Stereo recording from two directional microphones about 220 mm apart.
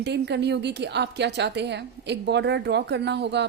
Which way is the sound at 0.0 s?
50° right (ahead or behind).